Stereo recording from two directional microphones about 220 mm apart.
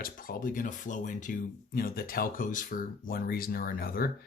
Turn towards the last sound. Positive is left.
turn(degrees=45)  # may be behind; listen again after turning